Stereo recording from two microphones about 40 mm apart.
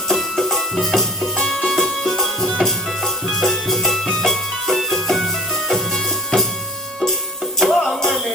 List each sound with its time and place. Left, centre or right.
0.1 s music: centre
7.6 s music: centre